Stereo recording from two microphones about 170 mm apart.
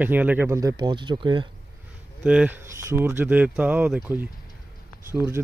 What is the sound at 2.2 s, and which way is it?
Speech, 10° right (ahead or behind).